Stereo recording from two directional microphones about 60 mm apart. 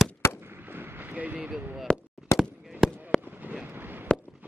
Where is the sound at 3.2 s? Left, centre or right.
Right.